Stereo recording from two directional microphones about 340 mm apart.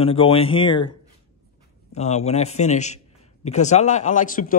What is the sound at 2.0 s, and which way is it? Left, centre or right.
A man's voice, centre.